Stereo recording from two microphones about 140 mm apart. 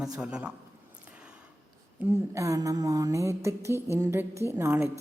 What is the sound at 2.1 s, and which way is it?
A woman's voice, 20° right (ahead or behind).